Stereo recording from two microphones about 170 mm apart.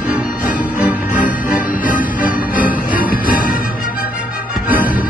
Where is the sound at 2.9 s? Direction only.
55° left (ahead or behind).